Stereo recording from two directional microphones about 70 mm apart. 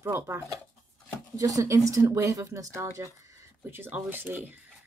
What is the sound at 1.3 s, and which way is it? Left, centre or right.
Speech, right.